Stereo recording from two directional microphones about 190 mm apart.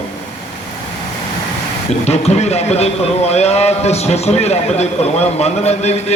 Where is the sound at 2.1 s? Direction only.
35° left (ahead or behind).